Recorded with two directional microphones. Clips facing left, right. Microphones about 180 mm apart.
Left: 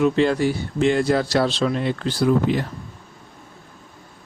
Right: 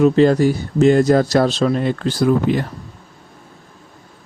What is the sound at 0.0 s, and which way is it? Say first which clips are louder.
Speech: right 6 dB; 40° right (ahead or behind).